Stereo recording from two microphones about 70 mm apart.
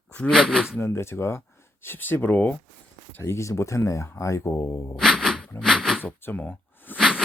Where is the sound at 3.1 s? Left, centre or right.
Left.